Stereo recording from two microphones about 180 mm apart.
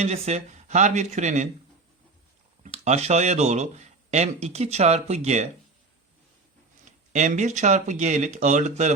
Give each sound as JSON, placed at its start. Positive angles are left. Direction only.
{"t": 0.0, "sound": "speech", "side_deg": -35}
{"t": 2.6, "sound": "speech", "side_deg": -35}
{"t": 7.1, "sound": "speech", "side_deg": -40}